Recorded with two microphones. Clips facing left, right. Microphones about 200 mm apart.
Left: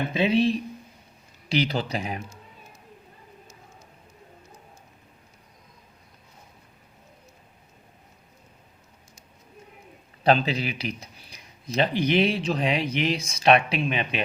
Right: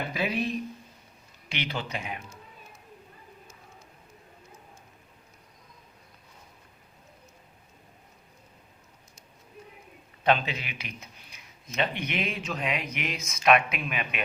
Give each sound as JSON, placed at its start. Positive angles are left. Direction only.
{"t": 0.1, "sound": "speech", "side_deg": 25}
{"t": 10.2, "sound": "speech", "side_deg": 35}